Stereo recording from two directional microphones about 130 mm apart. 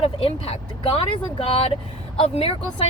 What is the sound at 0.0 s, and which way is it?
Speech, 45° left (ahead or behind).